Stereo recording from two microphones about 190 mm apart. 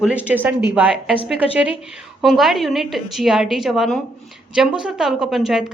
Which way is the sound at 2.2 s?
Centre (ahead or behind).